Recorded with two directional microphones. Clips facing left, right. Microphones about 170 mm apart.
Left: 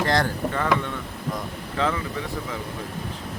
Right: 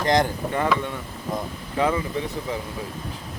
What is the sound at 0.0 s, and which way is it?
Speech, 20° right (ahead or behind).